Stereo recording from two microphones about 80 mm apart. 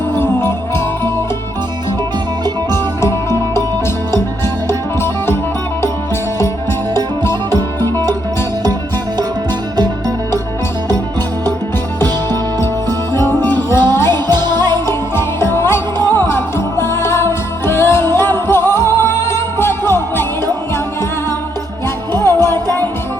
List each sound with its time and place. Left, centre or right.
2.7 s music: left
4.9 s music: left
11.9 s music: left
13.9 s jingle bell: left
14.3 s music: right
14.8 s music: left
22.1 s music: left